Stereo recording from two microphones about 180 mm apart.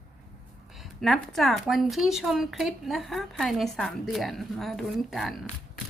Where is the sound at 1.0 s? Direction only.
Centre (ahead or behind).